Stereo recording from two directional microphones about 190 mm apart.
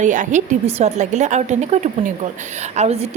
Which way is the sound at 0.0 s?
40° right (ahead or behind).